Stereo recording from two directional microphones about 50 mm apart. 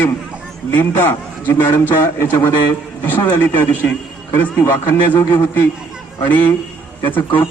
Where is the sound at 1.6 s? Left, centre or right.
Left.